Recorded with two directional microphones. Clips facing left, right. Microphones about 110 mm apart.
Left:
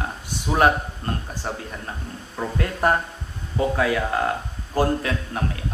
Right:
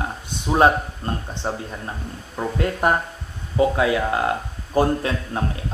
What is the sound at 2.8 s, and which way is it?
A man's voice, 20° right (ahead or behind).